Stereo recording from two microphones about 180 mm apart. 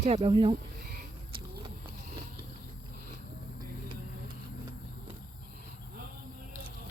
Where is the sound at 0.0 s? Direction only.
40° right (ahead or behind).